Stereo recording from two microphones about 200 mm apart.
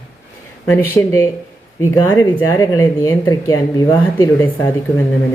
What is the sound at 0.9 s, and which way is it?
Speech, 15° left (ahead or behind).